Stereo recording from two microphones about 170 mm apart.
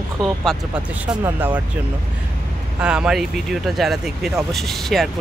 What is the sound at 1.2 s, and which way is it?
Speech, 10° right (ahead or behind).